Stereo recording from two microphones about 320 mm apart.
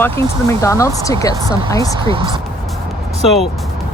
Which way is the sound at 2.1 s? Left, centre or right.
Centre.